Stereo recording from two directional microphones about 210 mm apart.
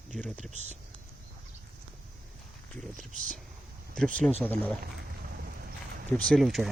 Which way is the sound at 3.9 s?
5° left (ahead or behind).